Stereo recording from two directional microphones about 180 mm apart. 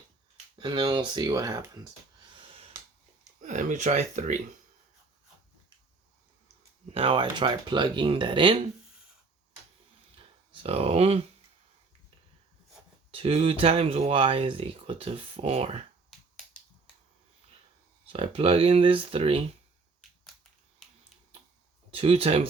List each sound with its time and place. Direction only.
0.6 s speech: 25° right (ahead or behind)
3.4 s speech: 45° right (ahead or behind)
6.9 s speech: 30° right (ahead or behind)
10.2 s speech: 30° right (ahead or behind)
13.1 s speech: 35° right (ahead or behind)
18.1 s speech: 30° right (ahead or behind)
21.9 s speech: 35° right (ahead or behind)